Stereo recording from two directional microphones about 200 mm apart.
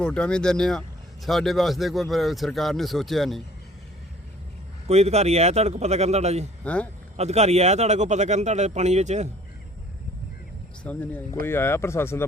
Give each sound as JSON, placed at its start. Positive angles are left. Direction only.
{"t": 0.0, "sound": "speech", "side_deg": 5}
{"t": 4.9, "sound": "speech", "side_deg": -30}
{"t": 6.7, "sound": "speech", "side_deg": 5}
{"t": 7.2, "sound": "speech", "side_deg": -35}
{"t": 10.8, "sound": "speech", "side_deg": 10}